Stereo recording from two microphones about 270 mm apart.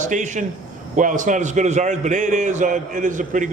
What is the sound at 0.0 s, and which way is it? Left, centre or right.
A man's voice, right.